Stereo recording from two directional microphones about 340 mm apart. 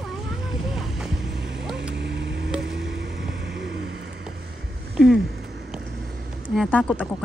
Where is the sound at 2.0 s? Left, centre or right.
Right.